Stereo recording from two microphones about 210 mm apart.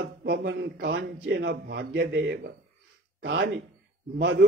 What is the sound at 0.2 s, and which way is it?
Speech, 55° right (ahead or behind).